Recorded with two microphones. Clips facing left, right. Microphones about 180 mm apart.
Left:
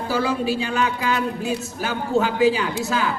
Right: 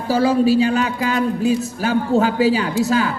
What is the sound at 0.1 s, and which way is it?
A man's voice, 35° right (ahead or behind).